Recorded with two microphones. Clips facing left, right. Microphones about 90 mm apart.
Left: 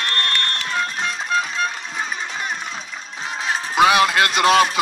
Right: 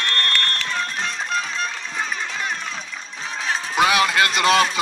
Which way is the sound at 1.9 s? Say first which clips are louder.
Even; 15° left (ahead or behind).